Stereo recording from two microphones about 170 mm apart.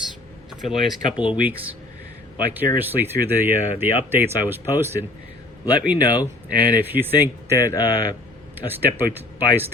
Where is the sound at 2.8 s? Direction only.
10° right (ahead or behind).